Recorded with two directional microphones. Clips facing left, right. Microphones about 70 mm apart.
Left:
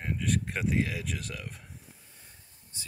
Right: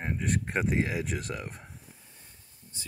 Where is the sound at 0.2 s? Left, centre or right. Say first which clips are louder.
Right 1 dB; right.